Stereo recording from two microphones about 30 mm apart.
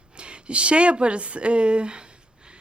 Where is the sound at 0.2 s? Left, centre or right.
Right.